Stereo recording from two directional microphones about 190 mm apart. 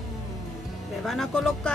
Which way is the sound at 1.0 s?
Centre (ahead or behind).